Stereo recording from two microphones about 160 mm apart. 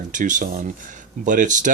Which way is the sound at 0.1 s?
50° right (ahead or behind).